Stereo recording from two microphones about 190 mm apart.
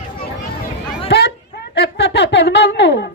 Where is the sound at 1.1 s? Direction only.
65° left (ahead or behind).